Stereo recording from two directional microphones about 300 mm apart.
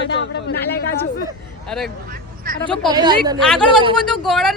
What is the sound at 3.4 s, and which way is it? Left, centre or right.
Speech, centre.